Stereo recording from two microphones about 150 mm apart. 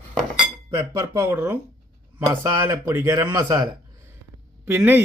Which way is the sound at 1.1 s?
15° right (ahead or behind).